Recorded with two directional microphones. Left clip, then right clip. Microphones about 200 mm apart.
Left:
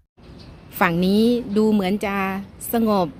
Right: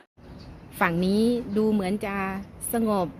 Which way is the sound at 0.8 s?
15° left (ahead or behind).